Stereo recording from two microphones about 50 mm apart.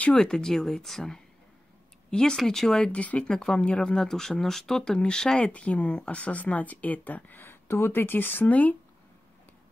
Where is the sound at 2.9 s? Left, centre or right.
Left.